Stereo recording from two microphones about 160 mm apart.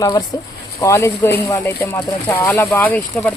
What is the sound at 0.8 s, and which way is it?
Speech, 20° left (ahead or behind).